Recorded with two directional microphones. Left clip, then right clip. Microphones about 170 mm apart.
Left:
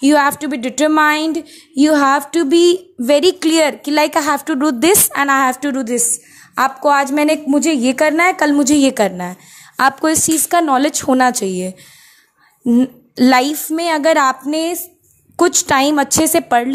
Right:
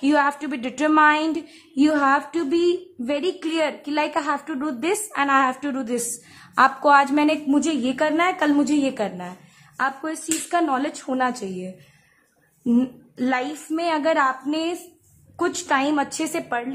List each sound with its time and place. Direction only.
0.0 s a woman's voice: 25° left (ahead or behind)
12.6 s a woman's voice: 20° left (ahead or behind)
13.1 s speech: 40° left (ahead or behind)
13.7 s a woman's voice: 25° left (ahead or behind)
15.3 s a woman's voice: 35° left (ahead or behind)
16.4 s speech: 40° left (ahead or behind)